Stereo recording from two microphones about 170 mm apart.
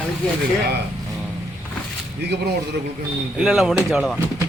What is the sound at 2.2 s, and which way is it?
Speech, 80° right.